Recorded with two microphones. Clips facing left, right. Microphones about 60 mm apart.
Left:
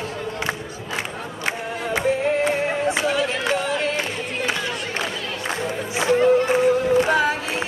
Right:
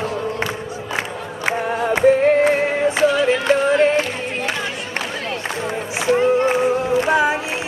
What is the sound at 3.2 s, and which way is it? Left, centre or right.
Music, right.